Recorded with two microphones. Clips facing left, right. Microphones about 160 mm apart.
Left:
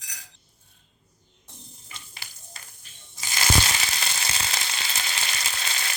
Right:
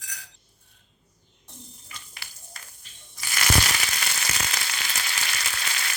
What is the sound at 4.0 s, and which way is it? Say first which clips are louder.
Frying: even; 25° left (ahead or behind).